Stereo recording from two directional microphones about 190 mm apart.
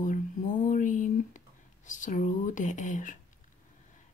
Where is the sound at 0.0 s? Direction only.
40° left (ahead or behind).